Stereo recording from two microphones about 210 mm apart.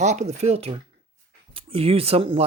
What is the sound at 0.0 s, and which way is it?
Speech, 35° right (ahead or behind).